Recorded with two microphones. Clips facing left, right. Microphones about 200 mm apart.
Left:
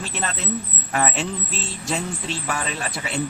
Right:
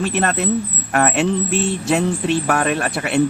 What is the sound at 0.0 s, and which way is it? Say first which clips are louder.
Speech: right 10 dB; 60° right (ahead or behind).